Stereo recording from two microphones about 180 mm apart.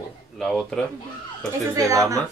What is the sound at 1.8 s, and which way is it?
Speech, 15° right (ahead or behind).